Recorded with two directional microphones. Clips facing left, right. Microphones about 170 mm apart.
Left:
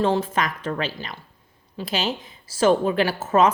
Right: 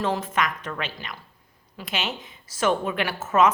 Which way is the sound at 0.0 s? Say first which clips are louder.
Left 4 dB; 30° left (ahead or behind).